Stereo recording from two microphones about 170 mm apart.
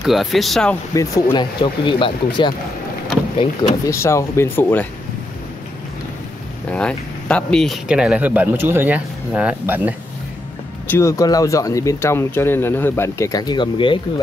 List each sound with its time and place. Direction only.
0.0 s speech: centre (ahead or behind)
0.9 s speech: 25° left (ahead or behind)
3.8 s speech: 15° left (ahead or behind)
6.7 s speech: 5° left (ahead or behind)
10.9 s speech: 15° left (ahead or behind)